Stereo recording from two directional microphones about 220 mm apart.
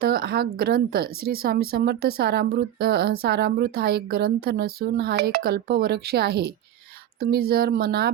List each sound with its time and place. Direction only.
0.0 s a woman's voice: 45° right (ahead or behind)